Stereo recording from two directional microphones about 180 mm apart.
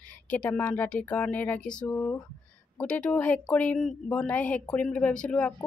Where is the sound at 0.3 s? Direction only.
10° left (ahead or behind).